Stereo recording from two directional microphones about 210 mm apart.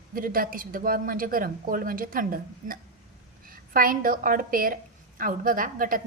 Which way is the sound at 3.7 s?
40° right (ahead or behind).